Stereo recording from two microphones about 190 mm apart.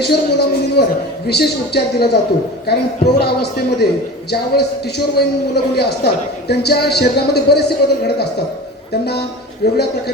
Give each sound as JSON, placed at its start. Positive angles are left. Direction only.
{"t": 0.0, "sound": "a man's voice", "side_deg": 60}
{"t": 9.6, "sound": "a man's voice", "side_deg": 55}